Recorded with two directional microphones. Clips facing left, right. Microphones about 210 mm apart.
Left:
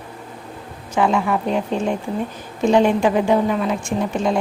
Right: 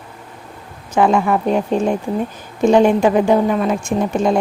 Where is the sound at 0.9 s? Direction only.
45° right (ahead or behind).